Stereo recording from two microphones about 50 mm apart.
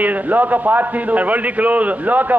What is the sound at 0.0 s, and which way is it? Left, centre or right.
A man's voice, right.